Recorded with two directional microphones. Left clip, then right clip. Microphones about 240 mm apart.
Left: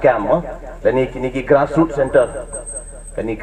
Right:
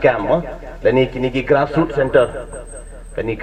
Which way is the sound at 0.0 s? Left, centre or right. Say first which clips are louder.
Left 1 dB; right.